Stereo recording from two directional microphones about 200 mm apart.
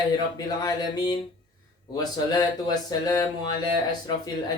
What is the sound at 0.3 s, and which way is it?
Speech, 20° left (ahead or behind).